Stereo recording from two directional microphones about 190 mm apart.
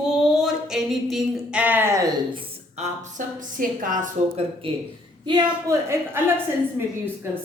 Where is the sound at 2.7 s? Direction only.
40° right (ahead or behind).